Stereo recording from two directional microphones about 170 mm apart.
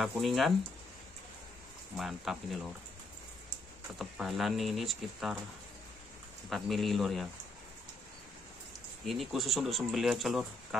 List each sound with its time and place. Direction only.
0.0 s speech: centre (ahead or behind)
2.0 s speech: centre (ahead or behind)
4.0 s speech: centre (ahead or behind)
6.5 s speech: centre (ahead or behind)
9.0 s speech: centre (ahead or behind)